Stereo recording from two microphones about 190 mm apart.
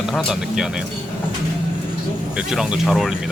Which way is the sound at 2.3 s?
5° right (ahead or behind).